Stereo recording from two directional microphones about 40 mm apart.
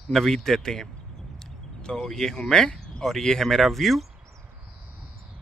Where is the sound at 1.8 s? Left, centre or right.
Left.